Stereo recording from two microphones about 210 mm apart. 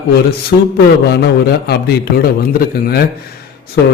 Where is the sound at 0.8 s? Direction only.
50° left (ahead or behind).